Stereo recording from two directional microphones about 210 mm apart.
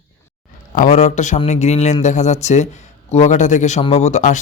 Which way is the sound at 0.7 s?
35° left (ahead or behind).